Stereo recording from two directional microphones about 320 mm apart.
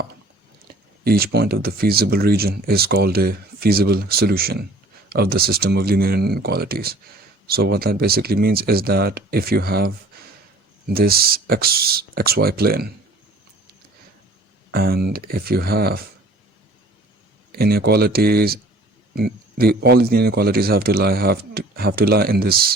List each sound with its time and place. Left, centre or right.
0.7 s a sound: right
1.0 s speech: right
14.7 s speech: right
17.5 s speech: right